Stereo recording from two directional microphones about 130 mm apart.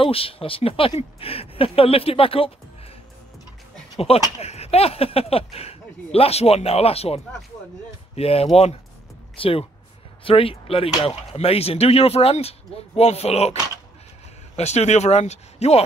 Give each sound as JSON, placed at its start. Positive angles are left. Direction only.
{"t": 0.0, "sound": "speech", "side_deg": 45}
{"t": 4.0, "sound": "speech", "side_deg": 50}
{"t": 8.2, "sound": "speech", "side_deg": 50}
{"t": 14.6, "sound": "speech", "side_deg": 60}